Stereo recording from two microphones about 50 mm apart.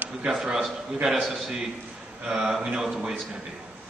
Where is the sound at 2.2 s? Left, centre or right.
Centre.